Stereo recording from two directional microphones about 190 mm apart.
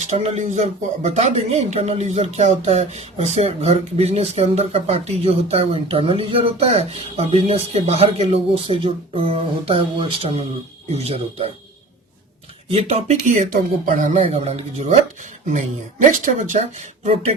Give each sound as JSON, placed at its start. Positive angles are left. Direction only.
{"t": 0.1, "sound": "speech", "side_deg": -35}
{"t": 12.6, "sound": "speech", "side_deg": -35}
{"t": 14.2, "sound": "speech", "side_deg": -30}